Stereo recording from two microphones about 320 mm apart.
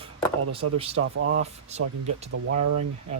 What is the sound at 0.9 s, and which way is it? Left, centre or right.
Speech, right.